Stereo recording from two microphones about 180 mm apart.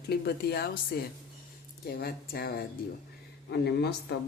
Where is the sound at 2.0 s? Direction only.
60° left (ahead or behind).